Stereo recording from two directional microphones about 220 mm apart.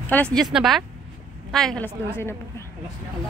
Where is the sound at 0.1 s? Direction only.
5° left (ahead or behind).